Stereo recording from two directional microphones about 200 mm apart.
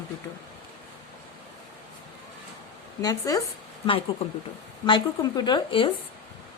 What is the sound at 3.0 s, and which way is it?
A woman's voice, 20° left (ahead or behind).